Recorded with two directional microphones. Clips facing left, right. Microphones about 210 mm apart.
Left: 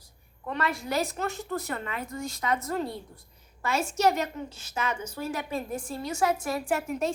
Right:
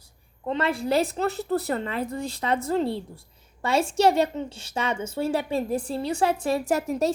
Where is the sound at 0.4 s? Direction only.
25° right (ahead or behind).